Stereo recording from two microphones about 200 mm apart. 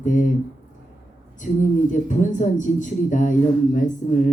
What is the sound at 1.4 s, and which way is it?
Speech, 40° left (ahead or behind).